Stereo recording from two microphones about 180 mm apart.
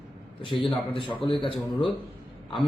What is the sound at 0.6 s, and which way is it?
Speech, 30° left (ahead or behind).